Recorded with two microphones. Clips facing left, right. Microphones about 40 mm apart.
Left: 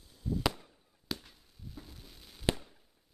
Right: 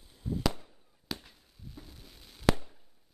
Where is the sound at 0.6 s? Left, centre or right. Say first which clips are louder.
Right 1 dB; centre.